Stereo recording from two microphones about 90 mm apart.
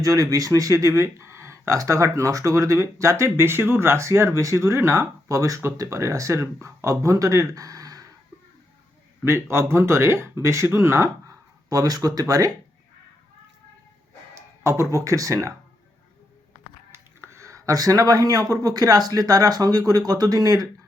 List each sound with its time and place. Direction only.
0.0 s speech: 40° right (ahead or behind)
9.2 s speech: 30° right (ahead or behind)
11.7 s speech: 45° right (ahead or behind)
14.3 s speech: 35° right (ahead or behind)
16.9 s speech: 30° right (ahead or behind)